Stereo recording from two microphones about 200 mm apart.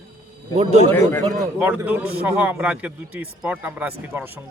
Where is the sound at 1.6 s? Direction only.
10° right (ahead or behind).